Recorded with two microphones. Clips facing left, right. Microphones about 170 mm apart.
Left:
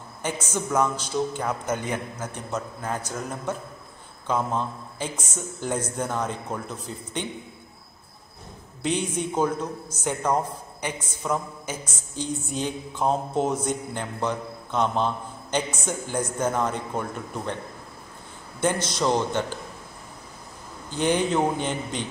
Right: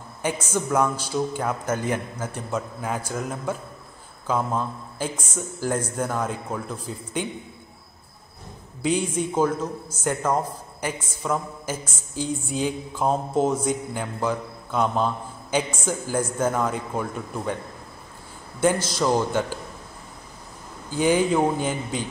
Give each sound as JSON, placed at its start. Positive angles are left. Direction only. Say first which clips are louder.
{"t": 0.2, "sound": "speech", "louder": "right 3 dB", "side_deg": -10}
{"t": 8.8, "sound": "speech", "louder": "right 3 dB", "side_deg": -5}
{"t": 18.6, "sound": "speech", "louder": "right 3 dB", "side_deg": -5}
{"t": 20.9, "sound": "speech", "louder": "right 3 dB", "side_deg": -5}